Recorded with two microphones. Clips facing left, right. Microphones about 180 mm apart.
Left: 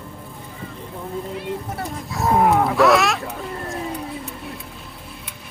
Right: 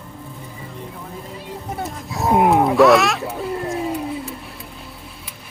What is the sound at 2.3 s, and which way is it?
Wild animals, 20° right (ahead or behind).